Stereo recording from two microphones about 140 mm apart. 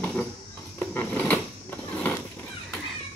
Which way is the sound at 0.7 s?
15° left (ahead or behind).